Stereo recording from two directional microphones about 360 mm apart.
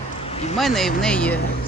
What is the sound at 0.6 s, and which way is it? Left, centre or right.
Speech, centre.